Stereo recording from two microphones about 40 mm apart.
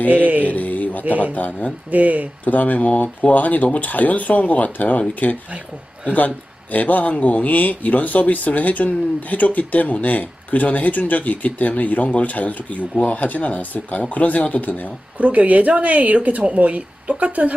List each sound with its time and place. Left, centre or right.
0.1 s mantra: right
0.5 s a sound: left
1.0 s speech: right
1.3 s speech: left
1.9 s speech: right
2.4 s speech: left
15.2 s speech: right